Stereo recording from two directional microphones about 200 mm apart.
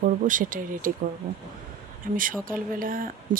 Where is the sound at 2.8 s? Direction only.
45° right (ahead or behind).